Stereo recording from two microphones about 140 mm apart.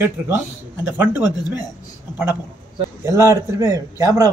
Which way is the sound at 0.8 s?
15° right (ahead or behind).